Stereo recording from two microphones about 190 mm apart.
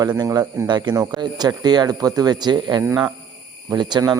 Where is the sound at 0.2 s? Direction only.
20° right (ahead or behind).